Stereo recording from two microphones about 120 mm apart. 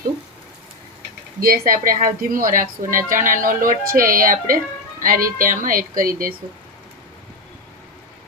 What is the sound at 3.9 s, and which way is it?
Speech, 90° right.